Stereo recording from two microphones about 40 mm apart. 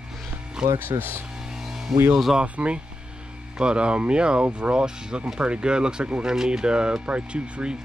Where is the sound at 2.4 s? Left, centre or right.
Right.